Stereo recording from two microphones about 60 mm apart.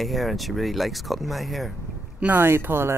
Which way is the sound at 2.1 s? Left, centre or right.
Right.